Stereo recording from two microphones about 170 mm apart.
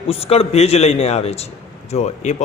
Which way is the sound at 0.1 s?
35° left (ahead or behind).